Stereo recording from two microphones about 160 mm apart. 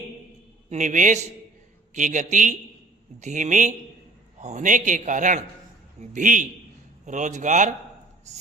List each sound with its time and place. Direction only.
0.7 s a man's voice: 50° right (ahead or behind)